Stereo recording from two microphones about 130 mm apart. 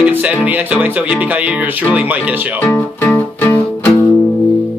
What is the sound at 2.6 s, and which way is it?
Music, 15° left (ahead or behind).